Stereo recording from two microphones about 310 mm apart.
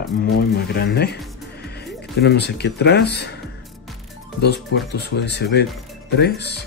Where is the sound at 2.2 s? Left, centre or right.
Left.